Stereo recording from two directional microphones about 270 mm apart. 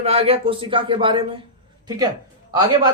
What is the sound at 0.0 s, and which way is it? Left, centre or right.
A man's voice, right.